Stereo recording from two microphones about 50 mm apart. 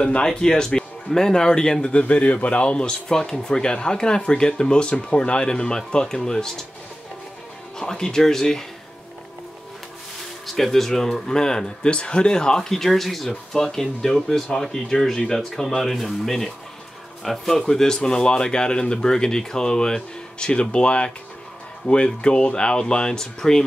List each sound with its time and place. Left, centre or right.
0.0 s speech: centre
7.7 s speech: centre
10.4 s speech: centre